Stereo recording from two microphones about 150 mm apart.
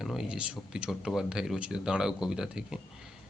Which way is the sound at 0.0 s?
5° right (ahead or behind).